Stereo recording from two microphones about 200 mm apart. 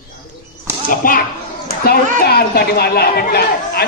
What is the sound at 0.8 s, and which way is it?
Speech, 45° left (ahead or behind).